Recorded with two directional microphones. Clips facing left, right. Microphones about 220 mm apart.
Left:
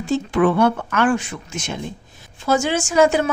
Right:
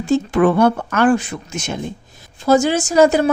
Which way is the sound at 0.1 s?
45° right (ahead or behind).